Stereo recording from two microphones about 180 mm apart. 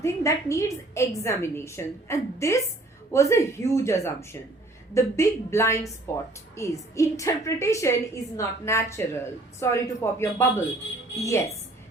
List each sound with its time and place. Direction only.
0.0 s a woman's voice: 15° left (ahead or behind)